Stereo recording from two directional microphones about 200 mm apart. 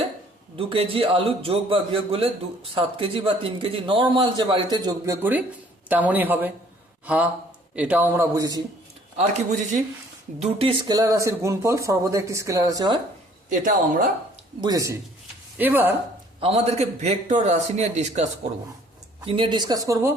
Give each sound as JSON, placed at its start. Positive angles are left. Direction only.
{"t": 0.5, "sound": "a man's voice", "side_deg": -30}
{"t": 10.4, "sound": "speech", "side_deg": -25}
{"t": 13.5, "sound": "a man's voice", "side_deg": -40}
{"t": 14.6, "sound": "speech", "side_deg": -15}
{"t": 16.4, "sound": "a man's voice", "side_deg": -30}